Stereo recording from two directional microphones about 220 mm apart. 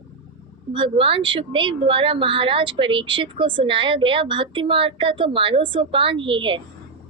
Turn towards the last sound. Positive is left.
turn(degrees=-20)  # may be behind; listen again after turning